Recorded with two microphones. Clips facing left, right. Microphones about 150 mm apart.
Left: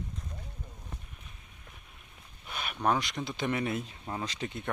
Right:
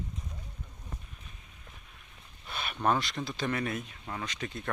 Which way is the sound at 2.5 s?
5° left (ahead or behind).